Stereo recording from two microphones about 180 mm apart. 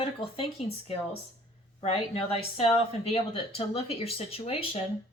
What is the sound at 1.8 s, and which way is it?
Speech, 30° left (ahead or behind).